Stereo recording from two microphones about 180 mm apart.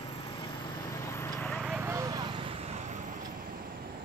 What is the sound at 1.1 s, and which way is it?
Clip-clop, 5° left (ahead or behind).